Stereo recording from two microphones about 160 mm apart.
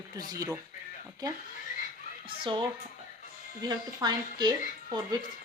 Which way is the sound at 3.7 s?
25° right (ahead or behind).